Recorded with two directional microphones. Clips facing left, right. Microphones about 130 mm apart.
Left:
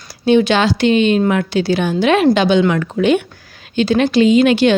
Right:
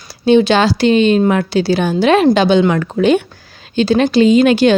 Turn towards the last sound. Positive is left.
turn(degrees=-40)  # may be behind; listen again after turning